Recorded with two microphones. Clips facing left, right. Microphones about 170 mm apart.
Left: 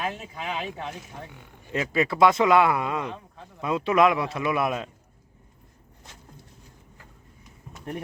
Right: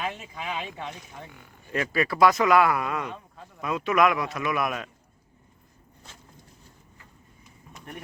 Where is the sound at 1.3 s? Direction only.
20° left (ahead or behind).